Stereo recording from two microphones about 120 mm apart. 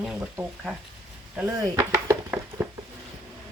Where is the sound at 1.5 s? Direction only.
30° right (ahead or behind).